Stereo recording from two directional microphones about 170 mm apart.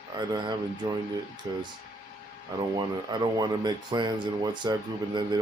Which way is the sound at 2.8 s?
25° right (ahead or behind).